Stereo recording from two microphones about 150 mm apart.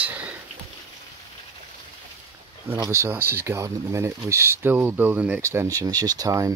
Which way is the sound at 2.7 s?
20° right (ahead or behind).